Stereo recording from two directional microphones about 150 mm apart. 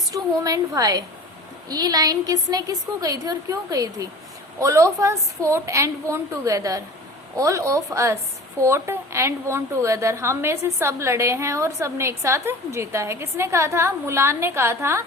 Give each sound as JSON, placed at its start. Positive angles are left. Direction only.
{"t": 0.1, "sound": "a woman's voice", "side_deg": -25}